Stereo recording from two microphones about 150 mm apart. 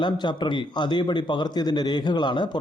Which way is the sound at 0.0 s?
30° left (ahead or behind).